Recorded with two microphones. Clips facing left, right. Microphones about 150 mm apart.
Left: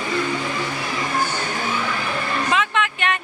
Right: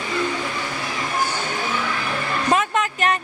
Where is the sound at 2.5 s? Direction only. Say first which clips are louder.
Right 3 dB; 40° right (ahead or behind).